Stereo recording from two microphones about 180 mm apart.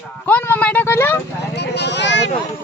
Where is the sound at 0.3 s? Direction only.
10° left (ahead or behind).